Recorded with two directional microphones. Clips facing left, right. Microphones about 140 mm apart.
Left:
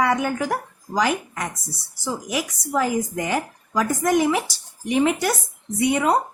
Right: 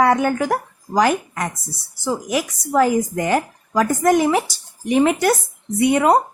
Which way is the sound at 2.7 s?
50° right (ahead or behind).